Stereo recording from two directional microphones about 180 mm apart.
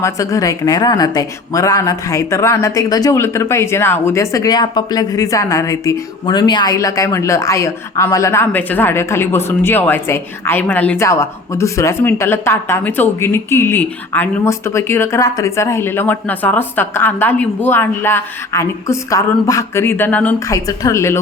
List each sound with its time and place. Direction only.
0.0 s a woman's voice: 20° left (ahead or behind)